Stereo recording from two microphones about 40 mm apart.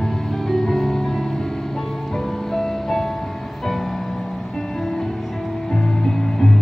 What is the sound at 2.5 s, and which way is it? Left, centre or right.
Music, centre.